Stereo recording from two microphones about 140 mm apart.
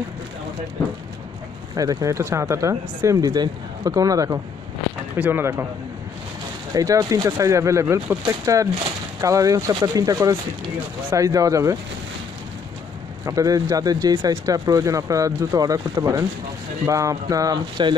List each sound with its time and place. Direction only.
1.8 s speech: 25° right (ahead or behind)
6.7 s speech: 25° right (ahead or behind)
13.2 s speech: 25° right (ahead or behind)